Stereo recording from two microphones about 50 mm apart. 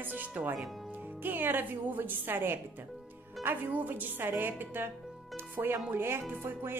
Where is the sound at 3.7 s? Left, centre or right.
Right.